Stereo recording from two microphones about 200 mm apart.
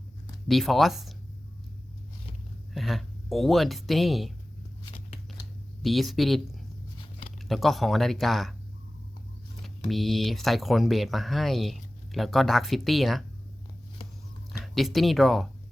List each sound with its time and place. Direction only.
0.4 s speech: centre (ahead or behind)
2.7 s speech: centre (ahead or behind)
4.9 s a sound: 35° left (ahead or behind)
5.8 s speech: centre (ahead or behind)
7.0 s a sound: 30° left (ahead or behind)
7.4 s speech: centre (ahead or behind)
9.6 s speech: centre (ahead or behind)
14.6 s speech: centre (ahead or behind)